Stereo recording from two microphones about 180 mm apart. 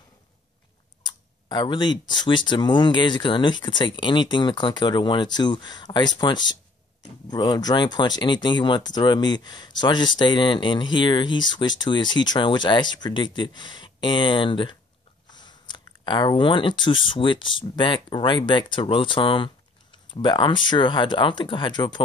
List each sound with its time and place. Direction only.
1.0 s speech: 25° left (ahead or behind)
15.2 s a sound: 25° left (ahead or behind)
17.1 s speech: 25° left (ahead or behind)